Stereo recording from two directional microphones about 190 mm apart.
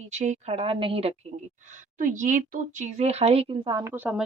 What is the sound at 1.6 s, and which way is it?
Speech, 40° right (ahead or behind).